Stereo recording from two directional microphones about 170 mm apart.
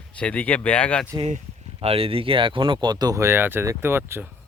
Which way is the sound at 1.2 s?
35° right (ahead or behind).